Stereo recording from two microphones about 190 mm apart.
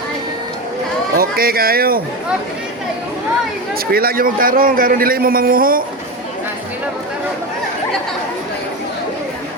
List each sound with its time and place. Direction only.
1.1 s speech: 50° right (ahead or behind)
3.9 s a man's voice: 50° right (ahead or behind)